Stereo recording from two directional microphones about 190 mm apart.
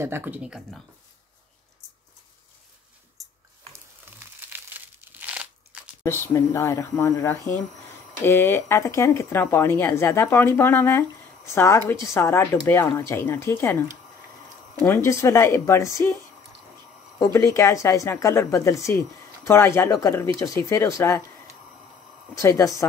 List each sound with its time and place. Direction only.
0.0 s speech: 10° right (ahead or behind)
3.2 s a sound: centre (ahead or behind)
4.5 s crumpling: 10° right (ahead or behind)
6.0 s a woman's voice: 15° left (ahead or behind)
17.2 s a woman's voice: 15° left (ahead or behind)
22.4 s a woman's voice: 15° left (ahead or behind)